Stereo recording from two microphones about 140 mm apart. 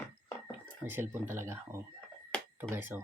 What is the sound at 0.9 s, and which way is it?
Speech, 15° right (ahead or behind).